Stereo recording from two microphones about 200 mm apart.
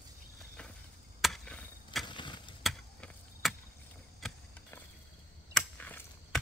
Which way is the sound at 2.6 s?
Centre (ahead or behind).